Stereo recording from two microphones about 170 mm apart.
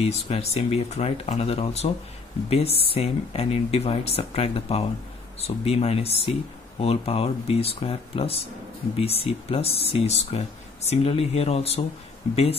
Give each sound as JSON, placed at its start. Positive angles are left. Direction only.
{"t": 0.0, "sound": "speech", "side_deg": 40}
{"t": 2.9, "sound": "speech", "side_deg": 35}